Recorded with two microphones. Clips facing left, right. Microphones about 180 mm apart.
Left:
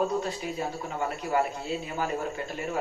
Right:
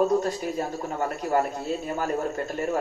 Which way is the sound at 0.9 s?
45° right (ahead or behind).